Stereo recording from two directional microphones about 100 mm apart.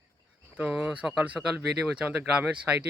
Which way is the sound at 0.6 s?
5° right (ahead or behind).